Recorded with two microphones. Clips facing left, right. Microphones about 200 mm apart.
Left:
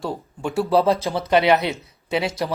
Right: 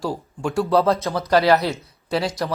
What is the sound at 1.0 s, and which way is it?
Speech, 30° left (ahead or behind).